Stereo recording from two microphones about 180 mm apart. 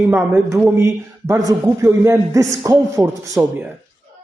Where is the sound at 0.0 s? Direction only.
15° right (ahead or behind).